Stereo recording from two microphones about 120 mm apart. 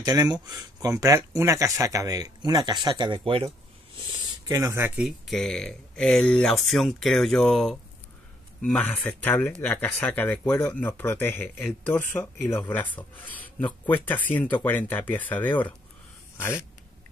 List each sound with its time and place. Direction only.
0.0 s speech: 30° right (ahead or behind)
4.5 s speech: 25° right (ahead or behind)
5.0 s speech: centre (ahead or behind)